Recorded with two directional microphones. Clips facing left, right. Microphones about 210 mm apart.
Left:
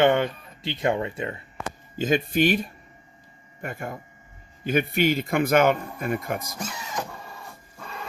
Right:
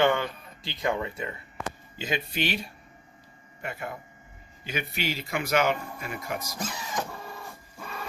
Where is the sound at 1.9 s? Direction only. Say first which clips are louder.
Left 10 dB; 45° left (ahead or behind).